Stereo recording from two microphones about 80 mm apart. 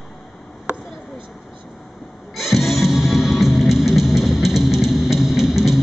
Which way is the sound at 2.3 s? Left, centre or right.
Centre.